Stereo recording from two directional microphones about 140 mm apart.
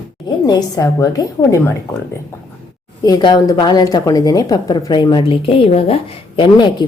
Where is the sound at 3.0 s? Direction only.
30° left (ahead or behind).